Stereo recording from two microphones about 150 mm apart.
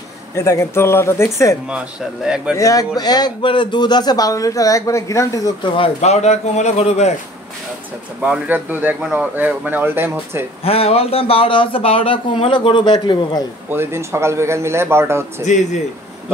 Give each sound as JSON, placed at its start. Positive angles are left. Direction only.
{"t": 0.3, "sound": "speech", "side_deg": 20}
{"t": 1.7, "sound": "speech", "side_deg": -5}
{"t": 2.5, "sound": "a man's voice", "side_deg": 20}
{"t": 5.8, "sound": "a man's voice", "side_deg": 45}
{"t": 8.2, "sound": "a man's voice", "side_deg": -10}
{"t": 10.6, "sound": "speech", "side_deg": 40}
{"t": 13.7, "sound": "a man's voice", "side_deg": -15}
{"t": 15.4, "sound": "a man's voice", "side_deg": 55}